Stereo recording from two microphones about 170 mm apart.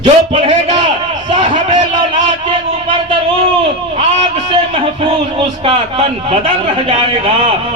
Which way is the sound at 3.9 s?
30° right (ahead or behind).